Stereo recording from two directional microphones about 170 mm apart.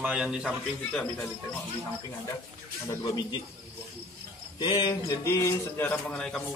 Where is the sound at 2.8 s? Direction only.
20° left (ahead or behind).